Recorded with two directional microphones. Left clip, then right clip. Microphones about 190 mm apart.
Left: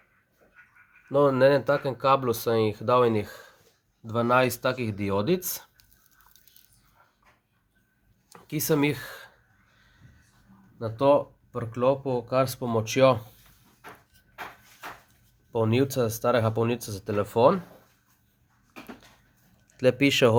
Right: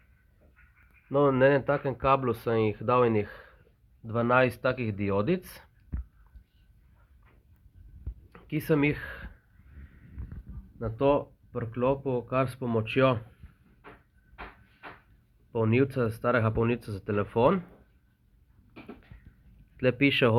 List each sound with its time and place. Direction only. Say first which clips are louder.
1.1 s speech: left 3 dB; 20° left (ahead or behind)
8.3 s speech: left 1 dB; 20° left (ahead or behind)
10.8 s speech: left 4 dB; 15° left (ahead or behind)
15.5 s speech: left 2 dB; 20° left (ahead or behind)
19.7 s speech: left 3 dB; 25° left (ahead or behind)